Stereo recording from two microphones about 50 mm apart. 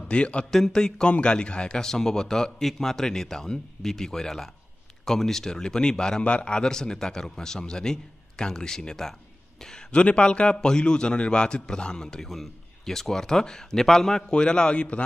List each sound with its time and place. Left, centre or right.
0.1 s speech: left
0.5 s a man's voice: centre